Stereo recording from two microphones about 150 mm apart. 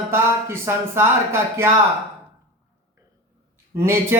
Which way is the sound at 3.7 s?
15° right (ahead or behind).